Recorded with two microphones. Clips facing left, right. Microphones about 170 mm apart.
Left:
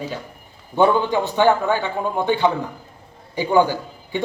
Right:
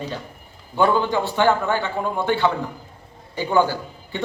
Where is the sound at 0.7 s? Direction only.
20° left (ahead or behind).